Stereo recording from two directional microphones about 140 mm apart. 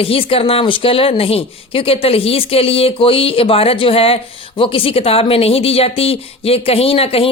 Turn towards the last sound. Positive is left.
turn(degrees=45)  # may be behind; listen again after turning